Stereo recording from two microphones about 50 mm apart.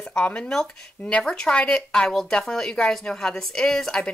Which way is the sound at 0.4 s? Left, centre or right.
Centre.